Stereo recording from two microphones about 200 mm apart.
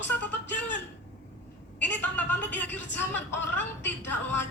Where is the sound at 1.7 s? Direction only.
10° left (ahead or behind).